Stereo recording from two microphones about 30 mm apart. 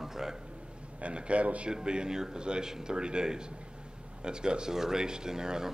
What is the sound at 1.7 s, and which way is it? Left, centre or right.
A man's voice, right.